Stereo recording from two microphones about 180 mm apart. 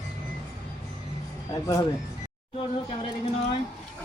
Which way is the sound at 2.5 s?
30° left (ahead or behind).